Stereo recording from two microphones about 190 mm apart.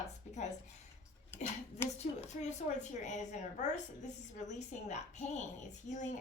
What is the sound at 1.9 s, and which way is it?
A woman's voice, 35° left (ahead or behind).